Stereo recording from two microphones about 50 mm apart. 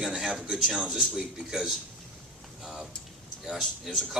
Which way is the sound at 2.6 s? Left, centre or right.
Centre.